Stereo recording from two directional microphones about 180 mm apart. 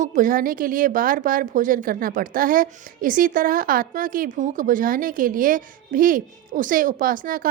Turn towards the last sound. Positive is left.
turn(degrees=-50)  # may be behind; listen again after turning